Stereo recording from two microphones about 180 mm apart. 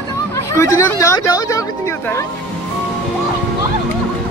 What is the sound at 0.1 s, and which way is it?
Speech, 15° left (ahead or behind).